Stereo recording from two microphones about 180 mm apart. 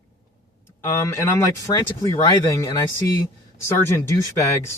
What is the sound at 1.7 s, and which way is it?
Speech, 20° left (ahead or behind).